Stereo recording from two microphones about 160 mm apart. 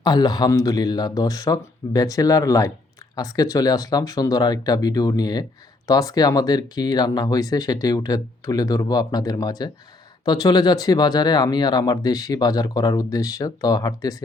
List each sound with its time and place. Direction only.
0.0 s speech: 25° left (ahead or behind)